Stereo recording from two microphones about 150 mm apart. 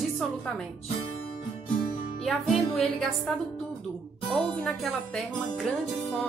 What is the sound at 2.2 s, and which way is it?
Speech, centre (ahead or behind).